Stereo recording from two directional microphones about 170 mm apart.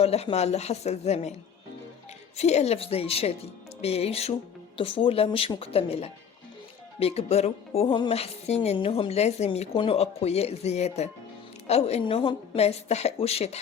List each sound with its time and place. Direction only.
0.0 s speech: 35° left (ahead or behind)
2.4 s speech: 40° left (ahead or behind)